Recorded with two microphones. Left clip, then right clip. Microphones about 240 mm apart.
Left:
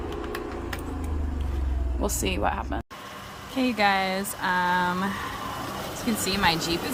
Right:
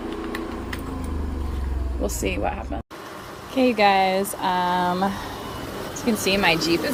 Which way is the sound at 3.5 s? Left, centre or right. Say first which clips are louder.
Right 5 dB; centre.